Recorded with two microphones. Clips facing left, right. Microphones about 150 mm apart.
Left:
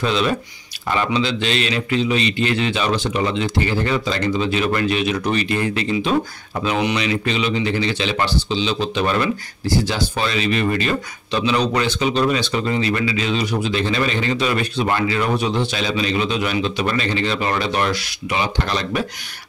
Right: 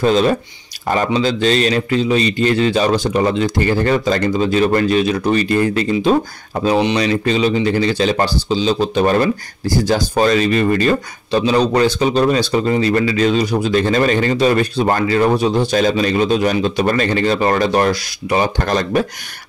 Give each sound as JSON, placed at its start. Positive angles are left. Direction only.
{"t": 0.0, "sound": "a man's voice", "side_deg": -40}